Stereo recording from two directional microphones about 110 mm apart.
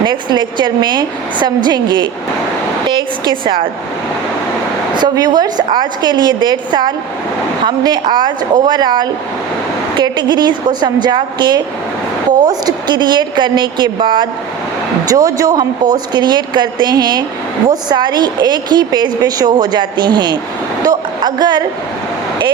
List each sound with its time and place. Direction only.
0.0 s a woman's voice: 45° right (ahead or behind)
4.9 s a woman's voice: 40° right (ahead or behind)
15.1 s a woman's voice: 35° right (ahead or behind)